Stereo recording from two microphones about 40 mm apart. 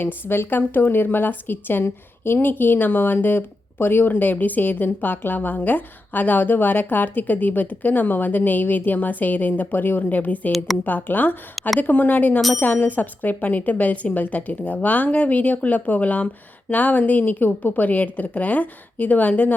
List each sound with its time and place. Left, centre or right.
0.3 s speech: left
2.4 s a woman's voice: left
9.7 s a woman's voice: left